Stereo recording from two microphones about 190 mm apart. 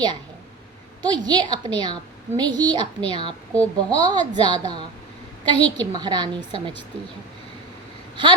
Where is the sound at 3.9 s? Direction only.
20° right (ahead or behind).